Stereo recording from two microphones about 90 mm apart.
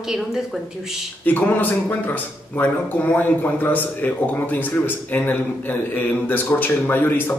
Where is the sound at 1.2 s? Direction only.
20° left (ahead or behind).